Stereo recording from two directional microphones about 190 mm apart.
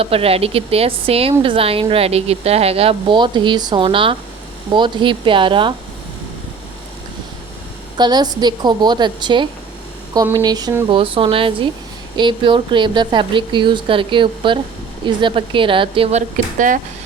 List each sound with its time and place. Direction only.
0.0 s a woman's voice: 30° right (ahead or behind)
7.9 s a woman's voice: 20° right (ahead or behind)
10.8 s a woman's voice: 25° right (ahead or behind)
16.6 s speech: 45° right (ahead or behind)